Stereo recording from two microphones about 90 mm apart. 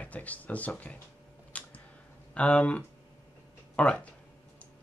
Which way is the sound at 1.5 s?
15° left (ahead or behind).